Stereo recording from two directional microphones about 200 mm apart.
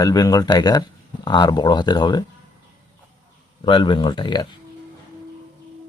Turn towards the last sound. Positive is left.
turn(degrees=20)  # may be behind; listen again after turning